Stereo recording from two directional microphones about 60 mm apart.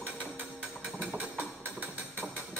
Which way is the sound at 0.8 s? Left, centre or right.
Centre.